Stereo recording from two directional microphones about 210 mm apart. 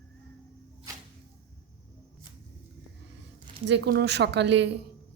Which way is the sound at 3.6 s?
55° right (ahead or behind).